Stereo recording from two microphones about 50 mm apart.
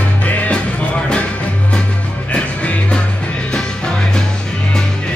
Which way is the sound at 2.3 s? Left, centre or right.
Left.